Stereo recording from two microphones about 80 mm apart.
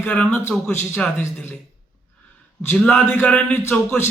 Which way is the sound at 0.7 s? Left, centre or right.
Left.